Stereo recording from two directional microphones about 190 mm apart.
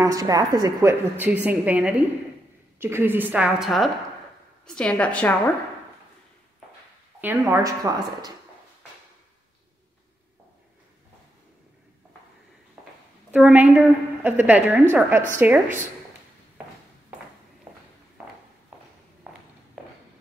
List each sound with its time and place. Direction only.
0.0 s a woman's voice: 20° right (ahead or behind); by 5.3 s 5° left (ahead or behind)
7.2 s a woman's voice: 10° right (ahead or behind)
13.3 s a woman's voice: 5° right (ahead or behind)